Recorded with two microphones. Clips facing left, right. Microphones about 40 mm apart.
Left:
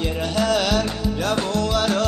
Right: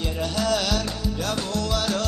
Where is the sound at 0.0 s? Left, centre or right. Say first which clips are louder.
Left 4 dB; left.